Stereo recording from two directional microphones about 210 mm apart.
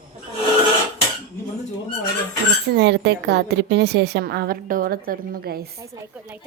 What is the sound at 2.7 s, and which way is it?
A woman's voice, 50° right (ahead or behind).